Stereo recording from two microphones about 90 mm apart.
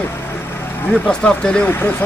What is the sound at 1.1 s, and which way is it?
Speech, 10° left (ahead or behind).